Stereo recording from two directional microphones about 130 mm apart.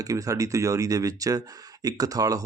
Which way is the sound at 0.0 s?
25° right (ahead or behind).